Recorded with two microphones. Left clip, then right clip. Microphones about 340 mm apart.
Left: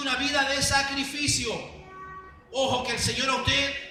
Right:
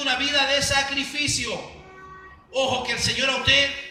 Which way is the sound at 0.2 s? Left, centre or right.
Left.